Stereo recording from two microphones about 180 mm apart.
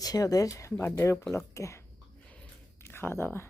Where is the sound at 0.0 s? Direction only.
20° left (ahead or behind).